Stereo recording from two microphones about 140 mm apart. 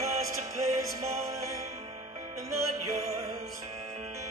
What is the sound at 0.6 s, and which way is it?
Music, 25° right (ahead or behind).